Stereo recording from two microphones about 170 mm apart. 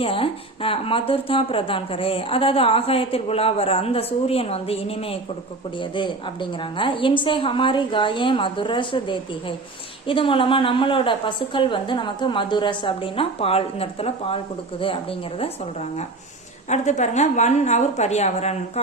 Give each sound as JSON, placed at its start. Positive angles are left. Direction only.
{"t": 0.0, "sound": "a woman's voice", "side_deg": 35}